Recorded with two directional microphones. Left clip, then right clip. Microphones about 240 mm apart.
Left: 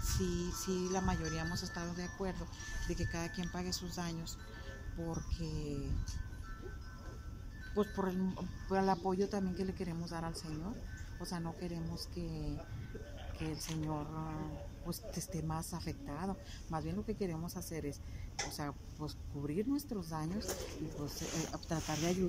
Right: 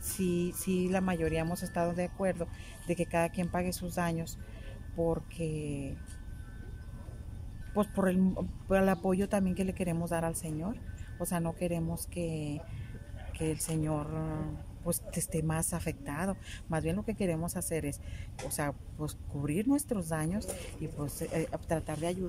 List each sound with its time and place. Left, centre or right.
0.2 s a woman's voice: right
7.7 s a woman's voice: right